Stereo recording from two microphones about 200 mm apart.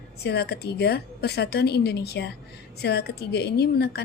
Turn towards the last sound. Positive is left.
turn(degrees=55)  # may be behind; listen again after turning